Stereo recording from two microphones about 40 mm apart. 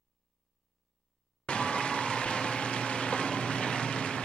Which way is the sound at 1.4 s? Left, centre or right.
Left.